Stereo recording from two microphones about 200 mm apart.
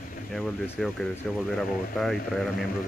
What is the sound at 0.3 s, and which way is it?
Speech, centre (ahead or behind).